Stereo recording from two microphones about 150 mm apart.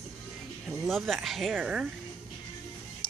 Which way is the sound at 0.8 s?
Centre (ahead or behind).